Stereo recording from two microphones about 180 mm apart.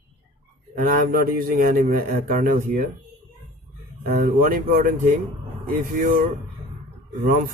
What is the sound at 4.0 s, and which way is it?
Speech, 45° right (ahead or behind).